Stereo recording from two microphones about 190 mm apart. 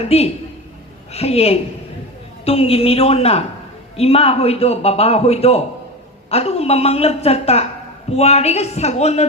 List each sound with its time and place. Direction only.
0.1 s a man's voice: 30° left (ahead or behind)